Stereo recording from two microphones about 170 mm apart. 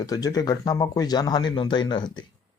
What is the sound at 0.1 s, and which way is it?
Speech, 20° left (ahead or behind).